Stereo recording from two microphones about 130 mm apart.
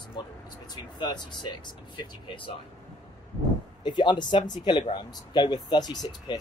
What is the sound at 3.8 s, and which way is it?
Speech, 35° left (ahead or behind).